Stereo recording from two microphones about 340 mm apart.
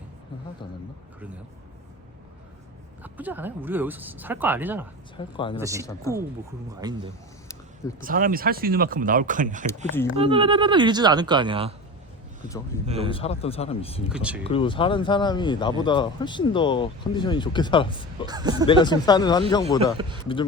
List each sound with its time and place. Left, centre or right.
3.0 s speech: centre
5.1 s speech: centre
5.5 s speech: centre
5.8 s speech: centre
6.7 s speech: centre
8.0 s speech: right
12.7 s speech: centre
14.1 s speech: centre
14.4 s speech: centre
18.3 s speech: centre
18.7 s speech: centre